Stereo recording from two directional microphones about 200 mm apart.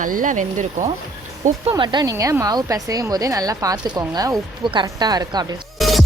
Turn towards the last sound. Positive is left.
turn(degrees=0)  # may be behind; listen again after turning